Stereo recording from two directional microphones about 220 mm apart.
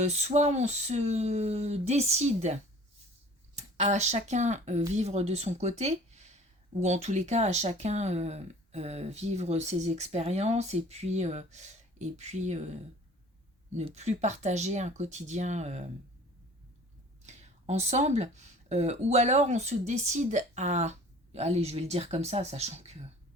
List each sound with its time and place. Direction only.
0.0 s speech: 30° right (ahead or behind)
13.7 s speech: 30° right (ahead or behind)
17.2 s speech: 30° right (ahead or behind)